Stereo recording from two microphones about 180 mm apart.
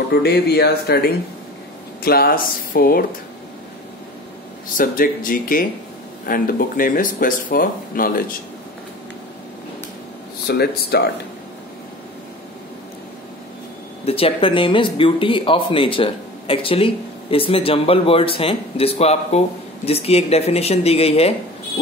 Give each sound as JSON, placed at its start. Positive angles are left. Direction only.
{"t": 0.1, "sound": "speech", "side_deg": 65}
{"t": 4.7, "sound": "speech", "side_deg": 50}
{"t": 10.4, "sound": "speech", "side_deg": 60}
{"t": 14.0, "sound": "speech", "side_deg": 30}